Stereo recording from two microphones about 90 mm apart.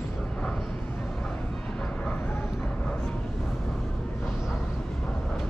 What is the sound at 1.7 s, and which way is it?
Vehicle, 10° left (ahead or behind).